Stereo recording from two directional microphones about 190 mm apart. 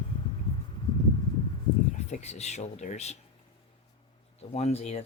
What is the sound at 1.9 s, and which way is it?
Speech, 35° left (ahead or behind).